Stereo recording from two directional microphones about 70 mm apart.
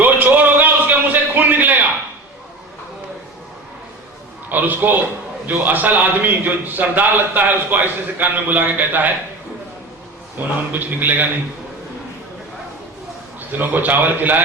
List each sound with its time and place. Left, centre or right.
0.0 s a sound: right
4.4 s a man's voice: right
10.3 s a man's voice: right
13.6 s a man's voice: right